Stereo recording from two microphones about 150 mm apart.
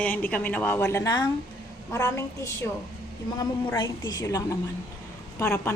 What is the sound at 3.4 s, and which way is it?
A woman's voice, 30° left (ahead or behind).